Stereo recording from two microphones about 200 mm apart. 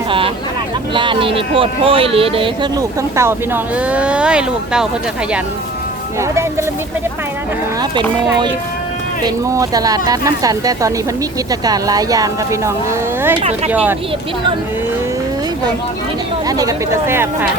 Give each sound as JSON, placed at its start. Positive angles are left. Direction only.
{"t": 0.9, "sound": "speech", "side_deg": -25}
{"t": 9.2, "sound": "speech", "side_deg": -20}
{"t": 16.5, "sound": "speech", "side_deg": -15}